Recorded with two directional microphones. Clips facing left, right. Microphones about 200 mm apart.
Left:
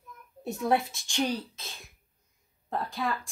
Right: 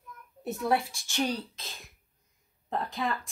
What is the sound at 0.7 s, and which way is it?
Speech, 15° left (ahead or behind).